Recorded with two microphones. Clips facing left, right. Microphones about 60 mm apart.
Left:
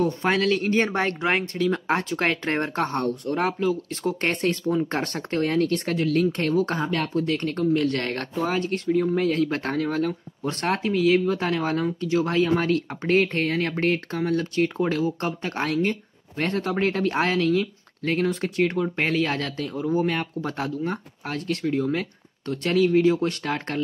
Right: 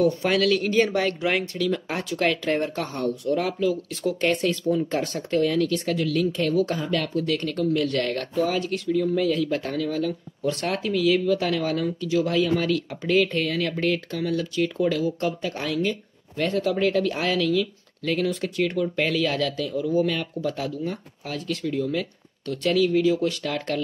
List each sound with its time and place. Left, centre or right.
0.0 s speech: left